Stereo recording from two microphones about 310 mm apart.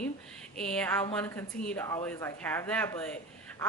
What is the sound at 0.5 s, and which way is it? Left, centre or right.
A woman's voice, centre.